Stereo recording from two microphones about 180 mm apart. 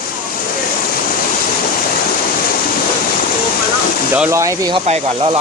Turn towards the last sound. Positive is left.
turn(degrees=-15)  # may be behind; listen again after turning